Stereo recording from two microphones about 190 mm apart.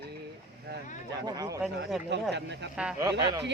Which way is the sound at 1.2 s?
20° right (ahead or behind).